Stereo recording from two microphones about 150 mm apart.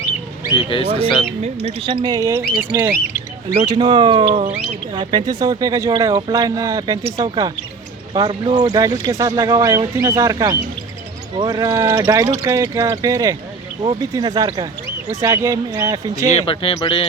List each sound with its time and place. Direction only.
0.5 s music: 35° left (ahead or behind)
1.6 s speech: 35° right (ahead or behind); by 2.9 s 20° right (ahead or behind)
3.7 s speech: 30° right (ahead or behind)
8.3 s speech: 35° right (ahead or behind)
16.3 s music: 35° left (ahead or behind)